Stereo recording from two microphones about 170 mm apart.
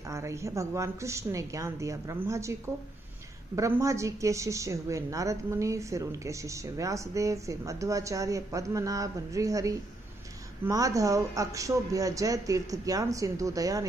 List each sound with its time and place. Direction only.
0.1 s a woman's voice: 15° right (ahead or behind)